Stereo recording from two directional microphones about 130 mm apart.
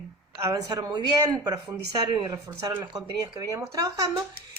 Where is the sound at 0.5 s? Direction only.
30° right (ahead or behind).